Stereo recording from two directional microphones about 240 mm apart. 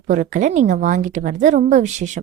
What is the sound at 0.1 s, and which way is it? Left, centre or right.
A woman's voice, right.